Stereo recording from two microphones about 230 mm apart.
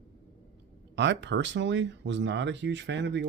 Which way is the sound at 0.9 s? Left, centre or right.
Right.